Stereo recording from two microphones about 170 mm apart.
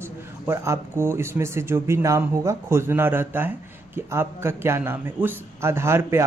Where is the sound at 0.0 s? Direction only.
15° right (ahead or behind).